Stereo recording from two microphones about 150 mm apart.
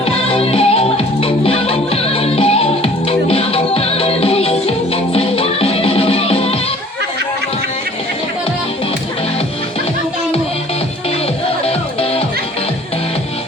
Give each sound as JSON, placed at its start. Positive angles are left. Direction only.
{"t": 0.0, "sound": "music", "side_deg": 40}
{"t": 11.6, "sound": "music", "side_deg": 40}